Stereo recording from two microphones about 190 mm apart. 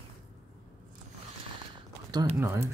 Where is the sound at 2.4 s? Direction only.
15° right (ahead or behind).